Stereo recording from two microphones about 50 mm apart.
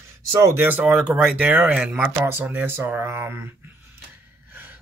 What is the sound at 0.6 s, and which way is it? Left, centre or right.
Speech, right.